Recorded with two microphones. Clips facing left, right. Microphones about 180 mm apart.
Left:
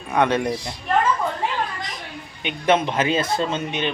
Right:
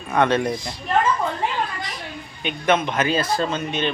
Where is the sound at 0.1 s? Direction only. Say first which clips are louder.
Right 1 dB; 15° left (ahead or behind).